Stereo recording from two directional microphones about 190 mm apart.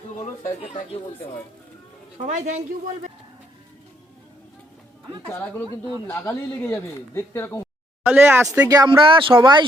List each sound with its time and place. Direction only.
0.4 s speech: 30° left (ahead or behind)
2.1 s speech: 40° right (ahead or behind)
5.3 s speech: 10° left (ahead or behind)
8.0 s speech: 10° right (ahead or behind)